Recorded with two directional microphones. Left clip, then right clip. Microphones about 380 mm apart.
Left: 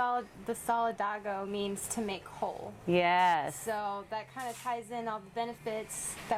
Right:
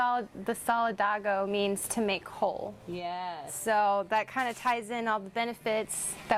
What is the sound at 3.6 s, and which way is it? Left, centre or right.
A woman's voice, right.